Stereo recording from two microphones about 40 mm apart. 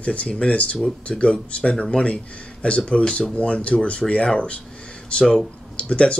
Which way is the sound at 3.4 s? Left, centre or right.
Left.